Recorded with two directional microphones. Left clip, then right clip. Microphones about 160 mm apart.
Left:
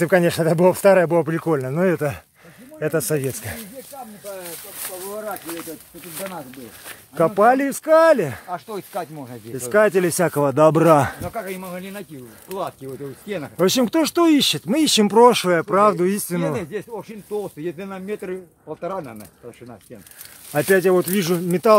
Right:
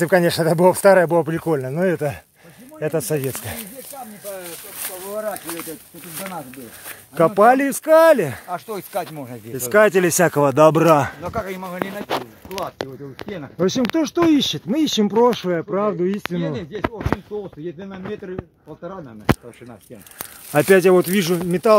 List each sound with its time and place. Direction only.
0.0 s speech: centre (ahead or behind)
3.2 s speech: centre (ahead or behind)
5.5 s a sound: 20° right (ahead or behind)
7.2 s speech: 20° right (ahead or behind)
8.5 s speech: 85° right
9.5 s speech: 5° right (ahead or behind); by 11.1 s 10° left (ahead or behind)
11.2 s speech: 40° right (ahead or behind)
13.6 s speech: 5° right (ahead or behind)
15.4 s speech: 20° left (ahead or behind)
16.3 s speech: centre (ahead or behind)
17.3 s speech: 35° right (ahead or behind)
20.5 s speech: 30° right (ahead or behind)
21.3 s speech: centre (ahead or behind)